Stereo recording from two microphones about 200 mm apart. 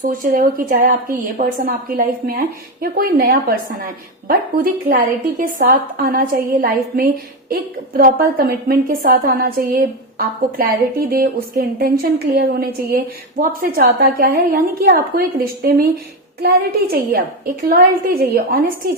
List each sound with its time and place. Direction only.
0.0 s a woman's voice: 45° right (ahead or behind)